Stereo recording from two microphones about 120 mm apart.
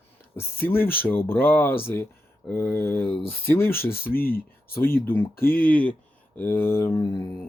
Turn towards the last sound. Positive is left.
turn(degrees=35)  # may be behind; listen again after turning